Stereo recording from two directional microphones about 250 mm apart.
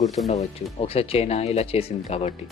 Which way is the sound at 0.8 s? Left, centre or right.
Left.